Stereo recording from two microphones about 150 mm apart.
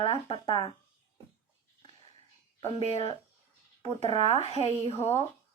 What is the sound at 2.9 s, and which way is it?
Speech, 45° left (ahead or behind).